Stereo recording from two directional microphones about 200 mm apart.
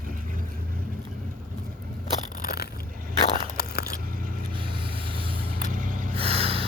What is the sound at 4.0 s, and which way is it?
Scrape, 45° right (ahead or behind).